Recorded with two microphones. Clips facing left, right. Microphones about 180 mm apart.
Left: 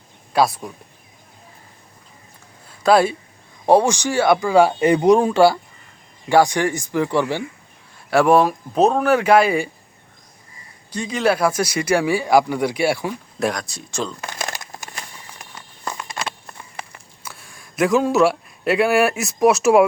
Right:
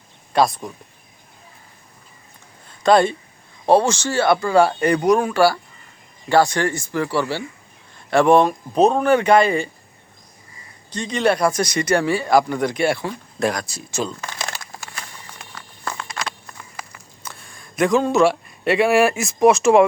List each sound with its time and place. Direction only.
0.3 s speech: 5° left (ahead or behind)
2.6 s a sound: 5° left (ahead or behind)
3.7 s speech: 15° left (ahead or behind)
7.9 s speech: 5° left (ahead or behind)
10.9 s speech: 5° left (ahead or behind)
13.5 s speech: centre (ahead or behind)
14.5 s a sound: 20° left (ahead or behind)
17.2 s speech: 5° left (ahead or behind)